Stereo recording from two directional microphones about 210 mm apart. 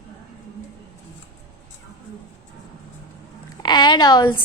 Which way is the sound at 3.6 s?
20° left (ahead or behind).